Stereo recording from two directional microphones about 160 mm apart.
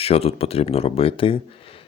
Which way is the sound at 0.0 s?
40° left (ahead or behind).